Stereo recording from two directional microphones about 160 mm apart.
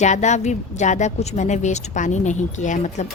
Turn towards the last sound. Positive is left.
turn(degrees=50)  # may be behind; listen again after turning